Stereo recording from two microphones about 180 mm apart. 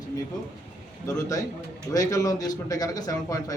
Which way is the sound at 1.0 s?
20° left (ahead or behind).